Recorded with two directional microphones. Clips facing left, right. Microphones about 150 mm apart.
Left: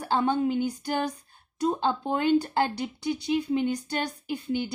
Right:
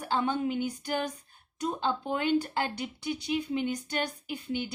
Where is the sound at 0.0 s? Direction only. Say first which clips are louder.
Left 4 dB; 35° left (ahead or behind).